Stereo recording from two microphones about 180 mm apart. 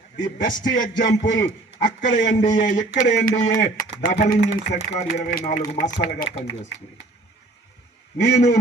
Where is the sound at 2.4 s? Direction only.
45° left (ahead or behind).